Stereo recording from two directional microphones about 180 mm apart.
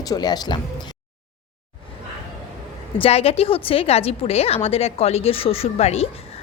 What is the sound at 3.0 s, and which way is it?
A woman's voice, 35° left (ahead or behind).